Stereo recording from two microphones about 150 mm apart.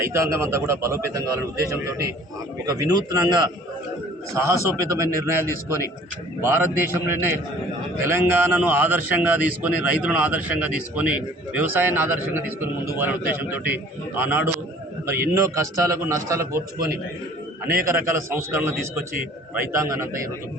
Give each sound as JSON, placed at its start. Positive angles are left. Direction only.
{"t": 0.0, "sound": "a man's voice", "side_deg": -20}
{"t": 6.4, "sound": "a man's voice", "side_deg": -15}
{"t": 16.7, "sound": "a man's voice", "side_deg": -80}
{"t": 17.8, "sound": "a man's voice", "side_deg": -15}